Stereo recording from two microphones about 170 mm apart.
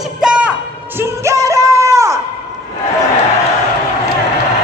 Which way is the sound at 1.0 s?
15° right (ahead or behind).